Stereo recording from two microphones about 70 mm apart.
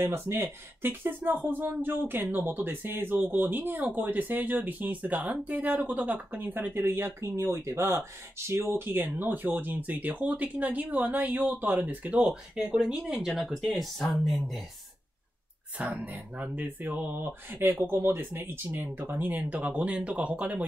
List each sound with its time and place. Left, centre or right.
0.0 s speech: right
12.2 s speech: centre
15.8 s speech: right